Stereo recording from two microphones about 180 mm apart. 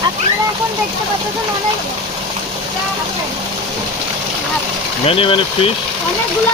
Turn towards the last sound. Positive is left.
turn(degrees=30)  # may be behind; listen again after turning